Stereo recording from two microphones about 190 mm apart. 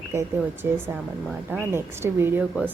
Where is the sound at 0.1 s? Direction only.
15° right (ahead or behind).